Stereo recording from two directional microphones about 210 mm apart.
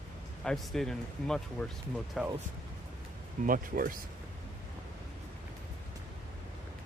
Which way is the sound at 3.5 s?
40° right (ahead or behind).